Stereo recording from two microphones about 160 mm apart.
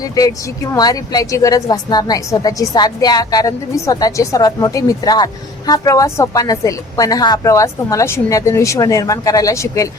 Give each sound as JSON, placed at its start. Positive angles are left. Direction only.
{"t": 0.2, "sound": "a woman's voice", "side_deg": 20}